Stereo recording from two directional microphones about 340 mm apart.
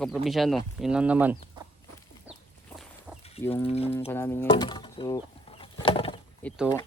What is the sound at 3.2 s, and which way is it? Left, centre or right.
Livestock, centre.